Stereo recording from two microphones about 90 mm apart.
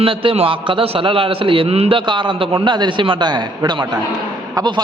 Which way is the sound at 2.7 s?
60° right (ahead or behind).